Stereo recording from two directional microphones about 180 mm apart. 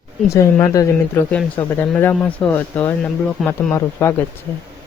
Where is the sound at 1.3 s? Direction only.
5° left (ahead or behind).